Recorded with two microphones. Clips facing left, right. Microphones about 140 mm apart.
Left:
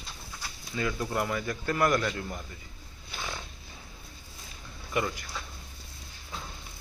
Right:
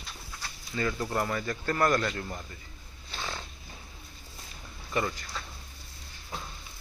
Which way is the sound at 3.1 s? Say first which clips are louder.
Right 1 dB; 10° left (ahead or behind).